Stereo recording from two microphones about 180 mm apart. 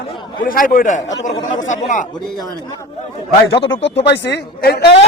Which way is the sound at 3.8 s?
85° left.